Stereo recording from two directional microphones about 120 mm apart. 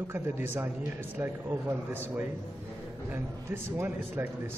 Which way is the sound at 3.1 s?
20° right (ahead or behind).